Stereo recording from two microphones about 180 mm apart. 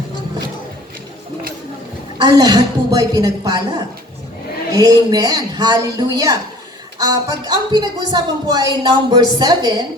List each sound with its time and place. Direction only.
2.2 s speech: 20° right (ahead or behind)